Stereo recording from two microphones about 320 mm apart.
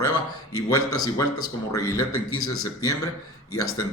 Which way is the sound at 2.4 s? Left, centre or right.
Centre.